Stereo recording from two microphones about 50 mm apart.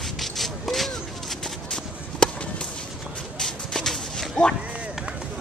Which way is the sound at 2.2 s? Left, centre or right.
Centre.